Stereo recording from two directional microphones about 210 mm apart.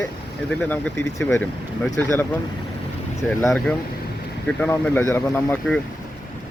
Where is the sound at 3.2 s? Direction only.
10° left (ahead or behind).